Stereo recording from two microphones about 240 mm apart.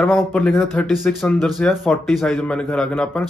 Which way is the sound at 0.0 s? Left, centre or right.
Centre.